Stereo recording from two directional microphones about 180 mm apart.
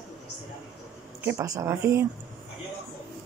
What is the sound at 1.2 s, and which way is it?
Speech, 15° right (ahead or behind).